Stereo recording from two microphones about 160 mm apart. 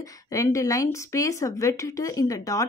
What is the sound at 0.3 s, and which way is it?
Speech, 20° left (ahead or behind).